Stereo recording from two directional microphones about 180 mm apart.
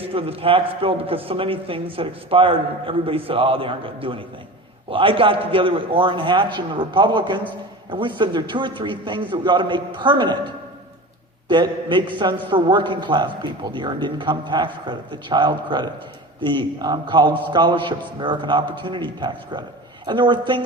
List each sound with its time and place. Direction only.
0.1 s a man's voice: 30° right (ahead or behind)
11.4 s a man's voice: 25° right (ahead or behind)